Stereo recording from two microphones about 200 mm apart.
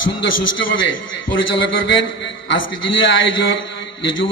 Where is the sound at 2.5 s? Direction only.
70° left (ahead or behind).